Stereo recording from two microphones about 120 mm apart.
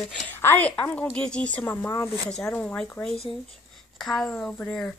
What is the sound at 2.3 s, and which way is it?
A woman's voice, 10° left (ahead or behind).